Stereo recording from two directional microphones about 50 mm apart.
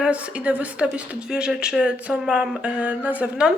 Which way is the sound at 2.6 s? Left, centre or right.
Right.